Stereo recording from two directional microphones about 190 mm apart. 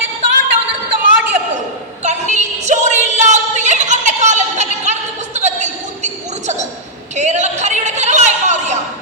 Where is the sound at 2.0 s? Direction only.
40° right (ahead or behind).